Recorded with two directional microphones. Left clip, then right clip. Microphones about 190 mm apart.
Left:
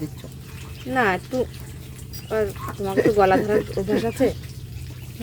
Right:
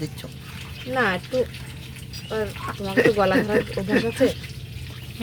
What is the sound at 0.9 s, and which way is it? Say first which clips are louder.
Speech: left 2 dB; 45° left (ahead or behind).